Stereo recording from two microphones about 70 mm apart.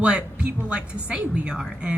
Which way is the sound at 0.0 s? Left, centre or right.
Centre.